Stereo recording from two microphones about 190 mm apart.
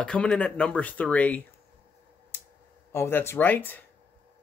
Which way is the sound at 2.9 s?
10° left (ahead or behind).